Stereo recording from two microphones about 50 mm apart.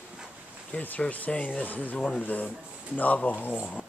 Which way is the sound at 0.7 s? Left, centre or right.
Left.